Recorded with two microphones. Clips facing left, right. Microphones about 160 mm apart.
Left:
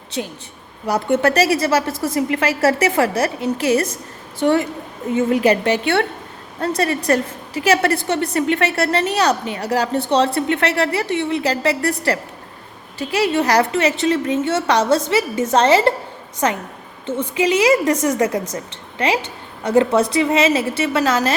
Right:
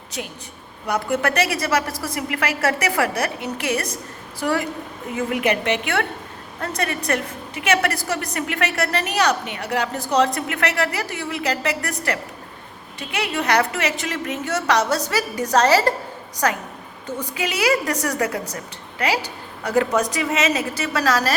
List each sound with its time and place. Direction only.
0.1 s a woman's voice: 30° left (ahead or behind)